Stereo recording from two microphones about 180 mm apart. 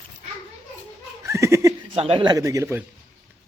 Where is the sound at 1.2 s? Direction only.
15° right (ahead or behind).